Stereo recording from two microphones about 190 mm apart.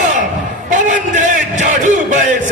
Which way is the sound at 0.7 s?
40° right (ahead or behind).